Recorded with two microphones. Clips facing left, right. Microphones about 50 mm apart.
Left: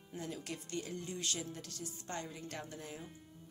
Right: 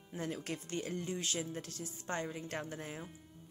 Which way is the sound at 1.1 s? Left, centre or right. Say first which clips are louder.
Right 3 dB; right.